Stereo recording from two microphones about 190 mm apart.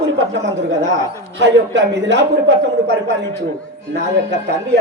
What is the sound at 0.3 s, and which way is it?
A man's voice, 75° right (ahead or behind).